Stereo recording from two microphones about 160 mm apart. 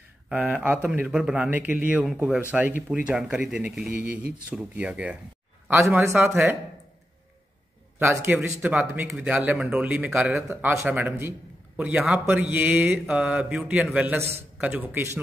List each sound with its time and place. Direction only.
0.3 s a man's voice: 10° right (ahead or behind)
8.0 s a man's voice: 15° right (ahead or behind)